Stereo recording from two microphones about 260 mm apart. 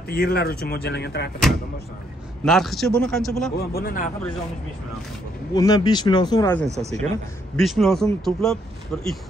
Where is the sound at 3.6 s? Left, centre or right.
Left.